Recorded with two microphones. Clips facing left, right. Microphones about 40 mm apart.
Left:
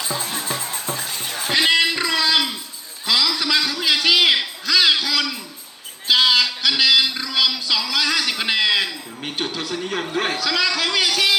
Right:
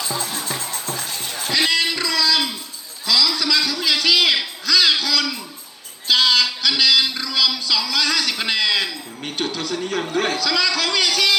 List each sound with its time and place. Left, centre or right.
0.0 s music: left
1.5 s a sound: left; by 5.4 s centre
6.1 s music: centre